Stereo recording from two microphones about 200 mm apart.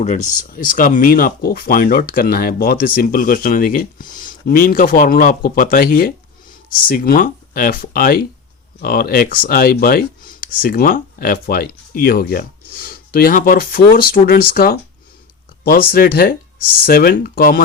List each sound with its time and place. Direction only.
0.0 s speech: 35° left (ahead or behind)